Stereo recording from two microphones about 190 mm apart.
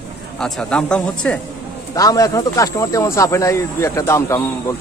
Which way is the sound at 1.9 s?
20° left (ahead or behind).